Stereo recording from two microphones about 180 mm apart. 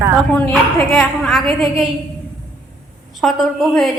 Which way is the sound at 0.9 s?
Centre (ahead or behind).